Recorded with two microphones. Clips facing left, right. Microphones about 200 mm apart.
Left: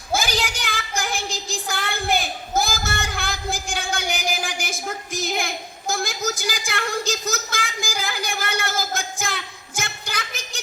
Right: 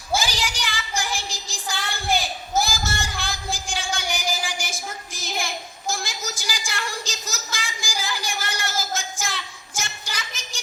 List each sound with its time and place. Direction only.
0.1 s child singing: 55° left (ahead or behind)